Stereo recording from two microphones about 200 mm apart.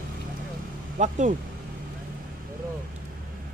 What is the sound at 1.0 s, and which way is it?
Speech, 35° right (ahead or behind).